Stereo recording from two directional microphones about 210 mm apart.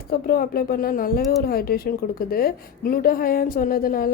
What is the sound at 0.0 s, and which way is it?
A woman's voice, 45° left (ahead or behind).